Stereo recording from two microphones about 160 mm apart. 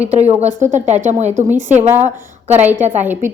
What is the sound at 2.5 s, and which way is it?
Speech, 10° right (ahead or behind).